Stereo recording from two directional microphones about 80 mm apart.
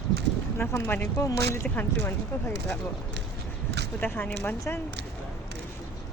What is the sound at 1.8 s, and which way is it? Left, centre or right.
Speech, left.